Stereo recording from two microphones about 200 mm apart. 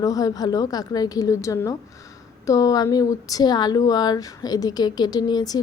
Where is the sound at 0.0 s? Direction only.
15° left (ahead or behind).